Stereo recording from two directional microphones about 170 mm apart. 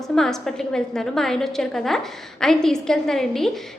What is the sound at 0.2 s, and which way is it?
A woman's voice, 5° left (ahead or behind).